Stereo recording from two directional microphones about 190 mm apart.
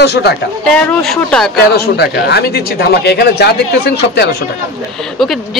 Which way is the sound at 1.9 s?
60° left (ahead or behind).